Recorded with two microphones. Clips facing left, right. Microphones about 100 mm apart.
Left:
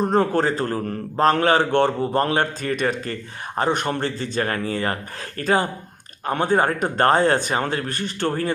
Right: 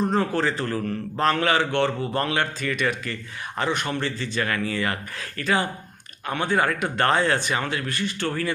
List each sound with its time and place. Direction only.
0.0 s a man's voice: 45° left (ahead or behind)